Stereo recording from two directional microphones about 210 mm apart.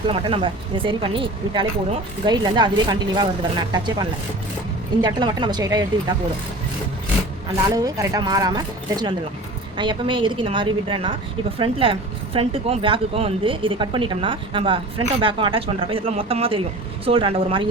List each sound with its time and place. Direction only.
0.1 s a woman's voice: 25° right (ahead or behind)
5.0 s a woman's voice: 20° right (ahead or behind)
7.8 s a woman's voice: 15° right (ahead or behind)